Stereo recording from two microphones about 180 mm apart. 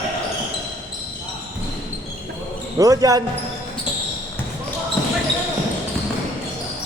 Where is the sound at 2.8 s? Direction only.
20° right (ahead or behind).